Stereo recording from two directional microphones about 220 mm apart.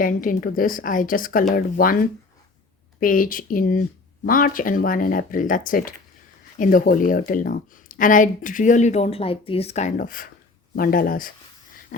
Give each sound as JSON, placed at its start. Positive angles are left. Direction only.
{"t": 0.0, "sound": "speech", "side_deg": 40}